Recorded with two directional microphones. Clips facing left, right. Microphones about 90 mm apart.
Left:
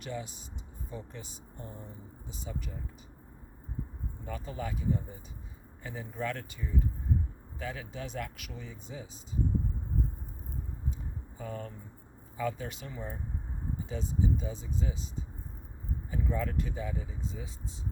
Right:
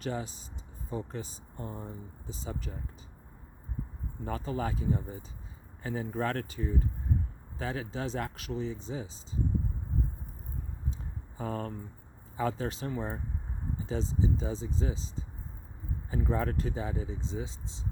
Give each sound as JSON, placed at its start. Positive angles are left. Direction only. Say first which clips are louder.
{"t": 0.0, "sound": "speech", "louder": "right 4 dB", "side_deg": -35}
{"t": 4.4, "sound": "speech", "louder": "right 2 dB", "side_deg": -35}
{"t": 11.3, "sound": "speech", "louder": "right 5 dB", "side_deg": -45}